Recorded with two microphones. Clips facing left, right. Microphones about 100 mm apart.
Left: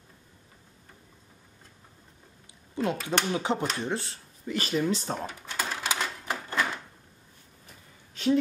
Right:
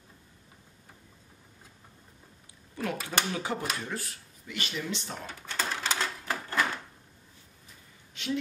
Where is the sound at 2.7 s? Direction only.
20° left (ahead or behind).